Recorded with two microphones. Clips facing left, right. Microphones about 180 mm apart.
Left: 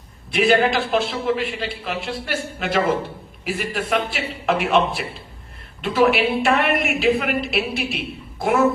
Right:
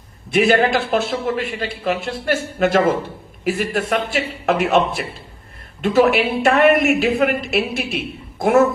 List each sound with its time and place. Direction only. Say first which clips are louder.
0.3 s a woman's voice: right 2 dB; 50° right (ahead or behind)